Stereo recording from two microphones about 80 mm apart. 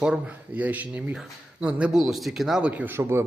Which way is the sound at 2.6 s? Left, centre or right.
Right.